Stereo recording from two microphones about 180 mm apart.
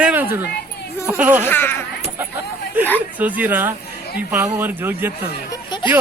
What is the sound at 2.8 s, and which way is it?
Speech, 10° right (ahead or behind).